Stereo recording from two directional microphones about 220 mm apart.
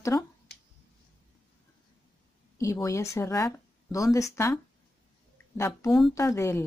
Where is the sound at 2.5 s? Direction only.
15° left (ahead or behind).